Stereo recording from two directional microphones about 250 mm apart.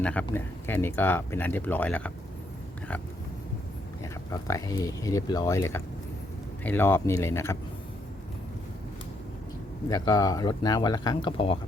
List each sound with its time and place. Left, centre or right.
0.0 s speech: centre
4.0 s speech: centre
9.9 s speech: centre